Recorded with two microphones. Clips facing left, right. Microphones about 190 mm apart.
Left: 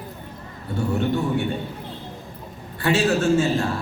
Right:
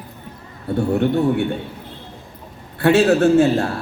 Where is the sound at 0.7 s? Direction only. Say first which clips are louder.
Right 5 dB; 60° right (ahead or behind).